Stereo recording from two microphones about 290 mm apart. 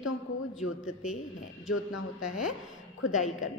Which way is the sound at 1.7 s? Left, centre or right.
Left.